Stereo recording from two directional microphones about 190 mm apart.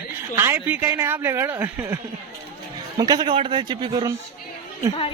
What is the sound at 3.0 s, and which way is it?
A man's voice, 20° right (ahead or behind).